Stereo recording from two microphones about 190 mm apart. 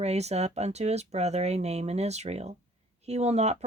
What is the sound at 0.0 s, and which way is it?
Speech, 35° right (ahead or behind).